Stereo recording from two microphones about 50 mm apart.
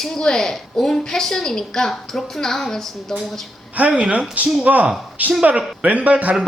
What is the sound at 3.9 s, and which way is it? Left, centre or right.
A man's voice, right.